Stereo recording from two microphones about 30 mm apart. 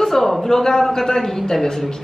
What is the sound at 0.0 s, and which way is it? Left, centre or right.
A man's voice, centre.